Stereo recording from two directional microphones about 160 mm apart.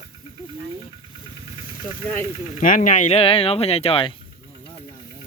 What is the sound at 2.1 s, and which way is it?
Speech, 55° left (ahead or behind).